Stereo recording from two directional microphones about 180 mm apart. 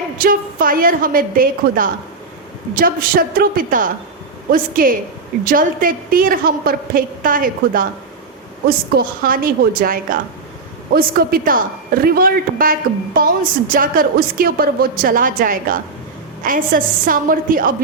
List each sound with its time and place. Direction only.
0.2 s a woman's voice: 50° right (ahead or behind)